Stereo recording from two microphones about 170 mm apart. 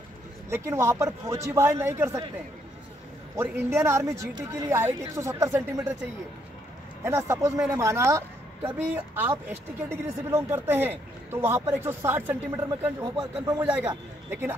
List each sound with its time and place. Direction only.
0.5 s speech: 15° right (ahead or behind)
3.3 s speech: 15° right (ahead or behind)
7.1 s speech: 15° right (ahead or behind)